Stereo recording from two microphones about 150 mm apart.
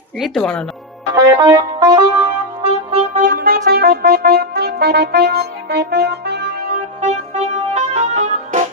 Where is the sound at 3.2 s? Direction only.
70° right (ahead or behind).